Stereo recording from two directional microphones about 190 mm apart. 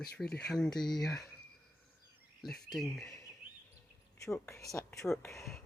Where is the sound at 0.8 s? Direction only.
20° left (ahead or behind).